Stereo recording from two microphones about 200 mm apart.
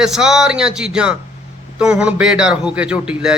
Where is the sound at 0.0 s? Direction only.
5° right (ahead or behind).